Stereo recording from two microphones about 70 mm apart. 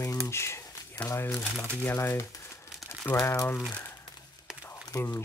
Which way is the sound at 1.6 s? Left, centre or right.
Left.